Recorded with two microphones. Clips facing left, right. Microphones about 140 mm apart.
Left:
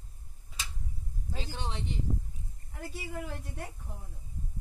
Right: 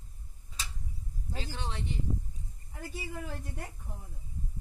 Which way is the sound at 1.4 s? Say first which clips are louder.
Even; 15° left (ahead or behind).